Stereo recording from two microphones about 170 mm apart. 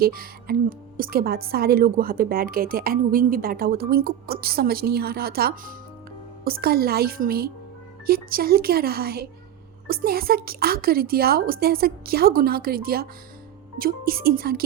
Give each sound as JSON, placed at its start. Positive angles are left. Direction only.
{"t": 0.0, "sound": "a woman's voice", "side_deg": -60}